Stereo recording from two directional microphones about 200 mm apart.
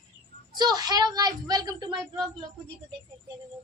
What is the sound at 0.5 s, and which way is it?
A woman's voice, 20° right (ahead or behind).